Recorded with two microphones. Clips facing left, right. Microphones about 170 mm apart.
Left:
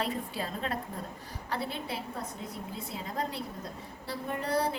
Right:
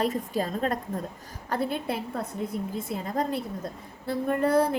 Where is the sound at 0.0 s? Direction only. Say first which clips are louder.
Right 7 dB; 45° right (ahead or behind).